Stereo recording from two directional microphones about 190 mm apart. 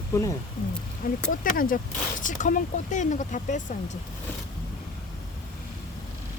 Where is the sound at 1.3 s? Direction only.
45° left (ahead or behind).